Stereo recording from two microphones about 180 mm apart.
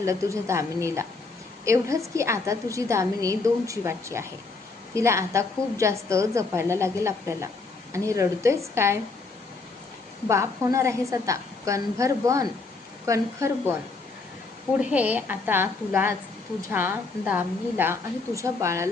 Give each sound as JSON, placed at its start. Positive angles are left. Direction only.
{"t": 0.0, "sound": "a woman's voice", "side_deg": -15}
{"t": 10.2, "sound": "a woman's voice", "side_deg": -15}
{"t": 14.8, "sound": "a woman's voice", "side_deg": -5}